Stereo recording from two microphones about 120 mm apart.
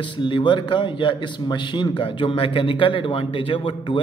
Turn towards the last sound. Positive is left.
turn(degrees=50)  # may be behind; listen again after turning